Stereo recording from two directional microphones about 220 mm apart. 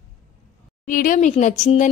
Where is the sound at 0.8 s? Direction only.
35° left (ahead or behind).